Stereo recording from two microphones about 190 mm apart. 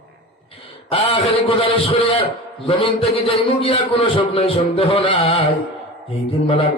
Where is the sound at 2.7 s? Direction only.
30° left (ahead or behind).